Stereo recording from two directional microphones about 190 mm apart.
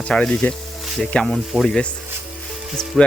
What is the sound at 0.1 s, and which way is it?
Speech, 5° left (ahead or behind).